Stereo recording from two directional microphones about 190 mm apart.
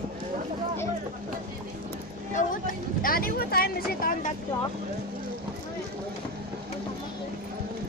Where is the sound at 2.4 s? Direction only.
40° left (ahead or behind).